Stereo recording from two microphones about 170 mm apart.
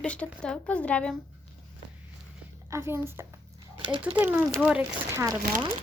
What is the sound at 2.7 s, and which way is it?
Speech, 15° right (ahead or behind).